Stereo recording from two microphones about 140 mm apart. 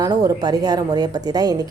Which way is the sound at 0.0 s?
25° right (ahead or behind).